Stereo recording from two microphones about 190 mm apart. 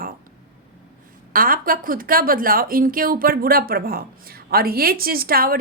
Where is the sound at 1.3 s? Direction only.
50° right (ahead or behind).